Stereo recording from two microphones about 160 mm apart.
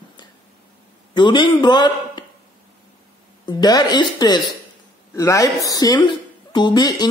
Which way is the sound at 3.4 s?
25° left (ahead or behind).